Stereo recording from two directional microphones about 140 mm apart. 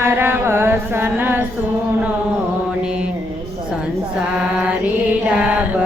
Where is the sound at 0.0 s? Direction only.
15° right (ahead or behind).